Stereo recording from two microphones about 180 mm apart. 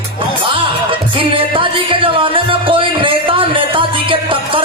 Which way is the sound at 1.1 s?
30° right (ahead or behind).